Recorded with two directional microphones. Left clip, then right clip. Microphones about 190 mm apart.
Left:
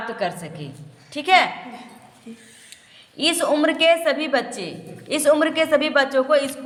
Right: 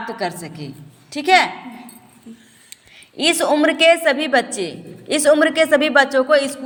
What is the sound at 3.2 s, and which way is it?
A woman's voice, 20° right (ahead or behind).